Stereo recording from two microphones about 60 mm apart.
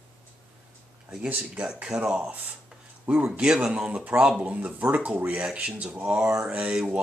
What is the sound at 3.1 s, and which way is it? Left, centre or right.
Speech, right.